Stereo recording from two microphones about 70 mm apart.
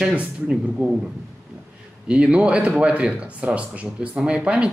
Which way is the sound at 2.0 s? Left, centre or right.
Centre.